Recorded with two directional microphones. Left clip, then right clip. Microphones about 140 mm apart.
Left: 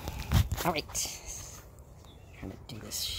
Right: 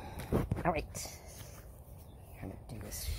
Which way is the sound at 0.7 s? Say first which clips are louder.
Left 5 dB; 25° left (ahead or behind).